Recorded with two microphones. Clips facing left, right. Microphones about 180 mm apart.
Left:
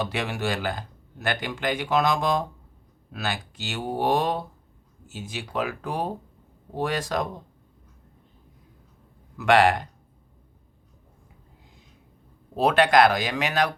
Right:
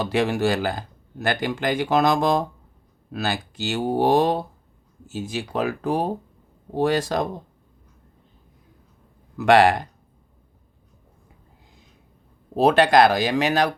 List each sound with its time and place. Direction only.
0.0 s speech: 40° right (ahead or behind)
9.4 s speech: 35° right (ahead or behind)
12.5 s speech: 35° right (ahead or behind)